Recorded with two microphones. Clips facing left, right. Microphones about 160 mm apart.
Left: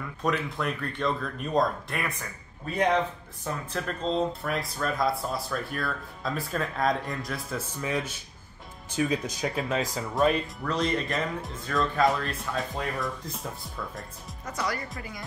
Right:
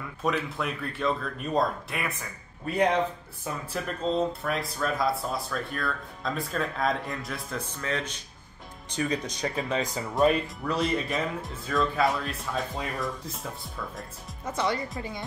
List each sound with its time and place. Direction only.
0.2 s speech: centre (ahead or behind)
3.7 s speech: 5° right (ahead or behind)
14.4 s speech: 25° right (ahead or behind)